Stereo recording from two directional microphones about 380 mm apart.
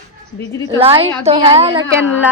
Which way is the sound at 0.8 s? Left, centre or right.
Centre.